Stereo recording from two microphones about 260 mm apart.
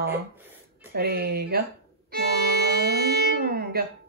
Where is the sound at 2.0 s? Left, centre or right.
Right.